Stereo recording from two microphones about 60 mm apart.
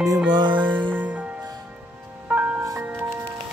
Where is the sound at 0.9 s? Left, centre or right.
Right.